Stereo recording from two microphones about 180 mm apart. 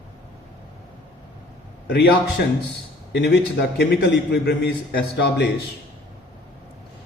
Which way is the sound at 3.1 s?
70° left (ahead or behind).